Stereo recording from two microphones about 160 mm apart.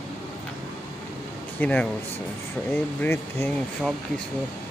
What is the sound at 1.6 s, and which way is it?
Speech, 10° left (ahead or behind).